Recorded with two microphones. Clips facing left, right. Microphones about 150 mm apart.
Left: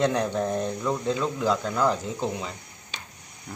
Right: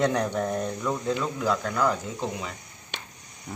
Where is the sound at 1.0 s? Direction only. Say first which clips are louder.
Left 1 dB; 5° right (ahead or behind).